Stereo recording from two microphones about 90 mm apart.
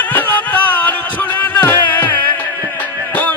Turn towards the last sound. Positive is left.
turn(degrees=20)  # may be behind; listen again after turning